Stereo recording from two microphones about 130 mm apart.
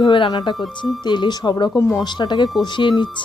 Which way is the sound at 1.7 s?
25° left (ahead or behind).